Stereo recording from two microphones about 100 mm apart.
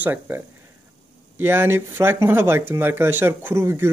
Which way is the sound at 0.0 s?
20° right (ahead or behind).